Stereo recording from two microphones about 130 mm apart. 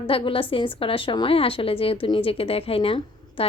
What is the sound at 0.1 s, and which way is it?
A woman's voice, 45° left (ahead or behind).